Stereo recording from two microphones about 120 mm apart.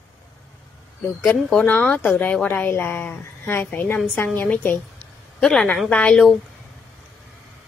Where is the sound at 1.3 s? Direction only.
10° left (ahead or behind).